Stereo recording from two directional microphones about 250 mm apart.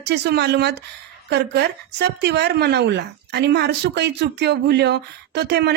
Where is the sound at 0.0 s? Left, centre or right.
Right.